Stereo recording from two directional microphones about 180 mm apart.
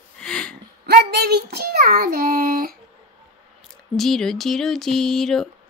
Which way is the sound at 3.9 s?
Centre (ahead or behind).